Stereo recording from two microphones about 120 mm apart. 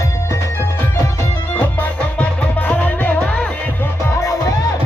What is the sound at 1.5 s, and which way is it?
Music, 15° left (ahead or behind).